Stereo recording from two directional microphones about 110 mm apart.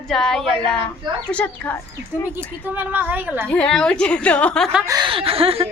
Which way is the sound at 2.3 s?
15° right (ahead or behind).